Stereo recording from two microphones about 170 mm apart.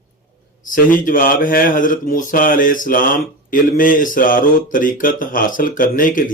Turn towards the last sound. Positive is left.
turn(degrees=55)  # may be behind; listen again after turning